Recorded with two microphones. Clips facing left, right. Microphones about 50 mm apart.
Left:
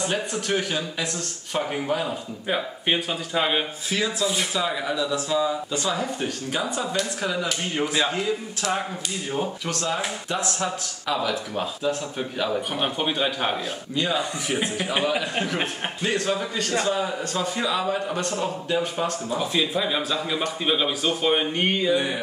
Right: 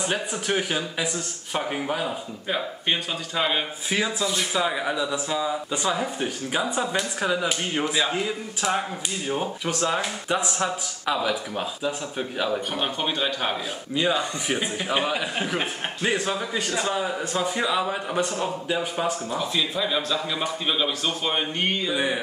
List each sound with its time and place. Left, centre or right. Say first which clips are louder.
0.0 s speech: left 1 dB; centre
2.4 s speech: left 2 dB; centre
3.9 s speech: even; centre
7.8 s speech: left 2 dB; centre
9.3 s speech: right 1 dB; centre
19.3 s speech: left 2 dB; centre
21.9 s speech: left 1 dB; centre